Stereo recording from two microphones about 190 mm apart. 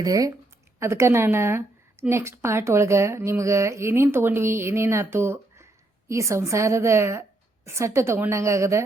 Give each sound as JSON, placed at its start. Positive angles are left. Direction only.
{"t": 0.0, "sound": "a woman's voice", "side_deg": -20}